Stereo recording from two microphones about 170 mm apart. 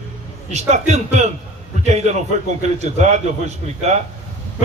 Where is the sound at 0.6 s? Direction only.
40° right (ahead or behind).